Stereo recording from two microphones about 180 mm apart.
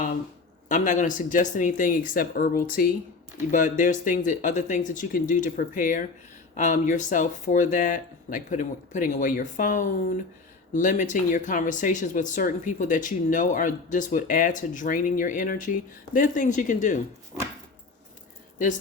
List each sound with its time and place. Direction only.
0.7 s speech: 45° left (ahead or behind)